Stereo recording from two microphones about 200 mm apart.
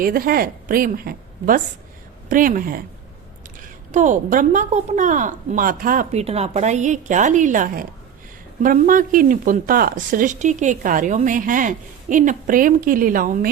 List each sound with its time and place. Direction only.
0.0 s a woman's voice: 45° right (ahead or behind)
3.9 s a woman's voice: 40° right (ahead or behind)